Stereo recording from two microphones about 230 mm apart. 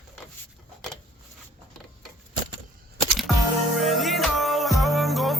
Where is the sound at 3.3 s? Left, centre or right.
Centre.